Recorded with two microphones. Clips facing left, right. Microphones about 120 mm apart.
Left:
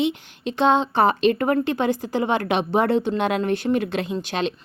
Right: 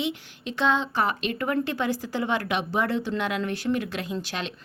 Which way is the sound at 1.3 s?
40° left (ahead or behind).